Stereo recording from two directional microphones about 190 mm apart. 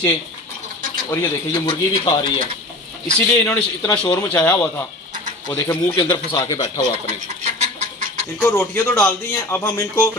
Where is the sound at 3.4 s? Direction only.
10° left (ahead or behind).